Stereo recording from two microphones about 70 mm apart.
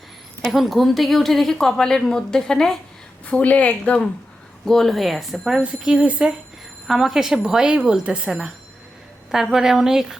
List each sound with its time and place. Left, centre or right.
0.5 s a woman's voice: centre
3.2 s a woman's voice: centre
4.6 s a woman's voice: centre
5.6 s speech: centre
6.8 s a woman's voice: centre